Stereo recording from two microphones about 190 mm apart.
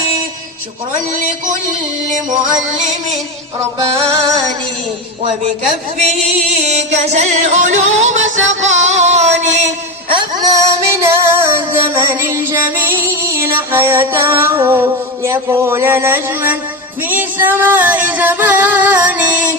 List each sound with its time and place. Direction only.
1.1 s a man's voice: 40° right (ahead or behind)
3.8 s music: 20° right (ahead or behind)
6.6 s music: 35° right (ahead or behind)
10.1 s music: 25° right (ahead or behind); by 19.5 s 10° right (ahead or behind)